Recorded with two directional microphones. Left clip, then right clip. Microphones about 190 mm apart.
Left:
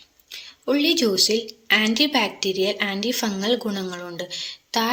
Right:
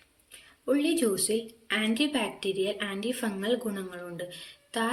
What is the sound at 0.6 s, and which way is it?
A woman's voice, 15° left (ahead or behind).